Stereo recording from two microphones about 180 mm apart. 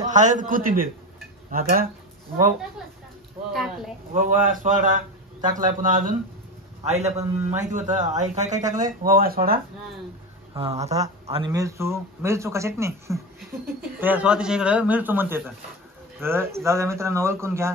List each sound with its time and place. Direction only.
0.1 s a man's voice: 45° right (ahead or behind)
3.5 s speech: centre (ahead or behind)
4.1 s a man's voice: 50° right (ahead or behind)
9.0 s a man's voice: 55° right (ahead or behind)
10.6 s a man's voice: 35° right (ahead or behind)
11.5 s speech: 15° right (ahead or behind)